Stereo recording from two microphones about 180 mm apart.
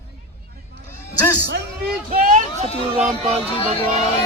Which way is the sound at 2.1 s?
40° right (ahead or behind).